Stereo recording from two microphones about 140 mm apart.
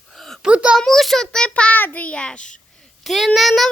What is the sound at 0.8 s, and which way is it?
Child singing, centre (ahead or behind).